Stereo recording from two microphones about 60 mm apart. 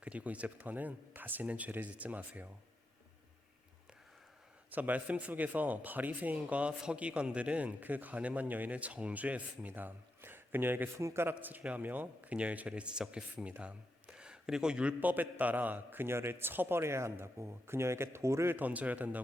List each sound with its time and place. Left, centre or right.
0.0 s speech: right
4.7 s speech: right
10.9 s a man's voice: right
11.3 s speech: right
15.1 s a man's voice: right
18.5 s speech: right